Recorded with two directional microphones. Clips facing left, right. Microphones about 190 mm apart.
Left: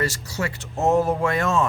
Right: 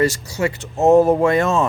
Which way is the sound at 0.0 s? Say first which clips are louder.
Right 7 dB; 15° right (ahead or behind).